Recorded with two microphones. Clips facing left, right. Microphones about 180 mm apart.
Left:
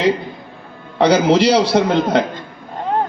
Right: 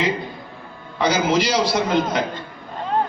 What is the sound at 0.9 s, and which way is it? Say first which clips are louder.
A man's voice: left 6 dB; 65° left (ahead or behind).